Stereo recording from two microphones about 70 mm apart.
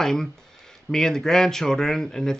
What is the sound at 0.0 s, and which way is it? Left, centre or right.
Speech, centre.